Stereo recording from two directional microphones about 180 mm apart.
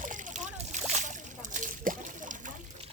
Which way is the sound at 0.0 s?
45° right (ahead or behind).